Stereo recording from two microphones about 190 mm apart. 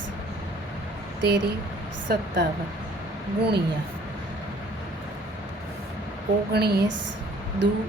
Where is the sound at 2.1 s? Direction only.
55° right (ahead or behind).